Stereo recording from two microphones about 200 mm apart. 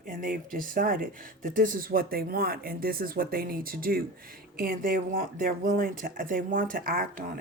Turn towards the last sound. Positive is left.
turn(degrees=-50)  # may be behind; listen again after turning